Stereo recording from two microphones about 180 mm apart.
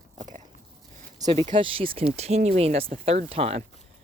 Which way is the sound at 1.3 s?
30° right (ahead or behind).